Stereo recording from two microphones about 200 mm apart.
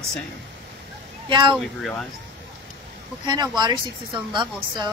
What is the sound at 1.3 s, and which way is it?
Speech, 25° right (ahead or behind).